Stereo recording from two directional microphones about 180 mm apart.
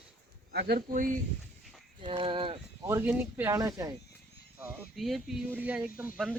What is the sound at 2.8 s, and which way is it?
Speech, 10° right (ahead or behind).